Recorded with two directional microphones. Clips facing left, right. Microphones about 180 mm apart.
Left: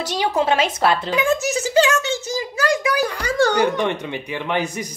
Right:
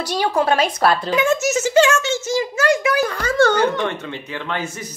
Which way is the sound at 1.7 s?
35° left (ahead or behind).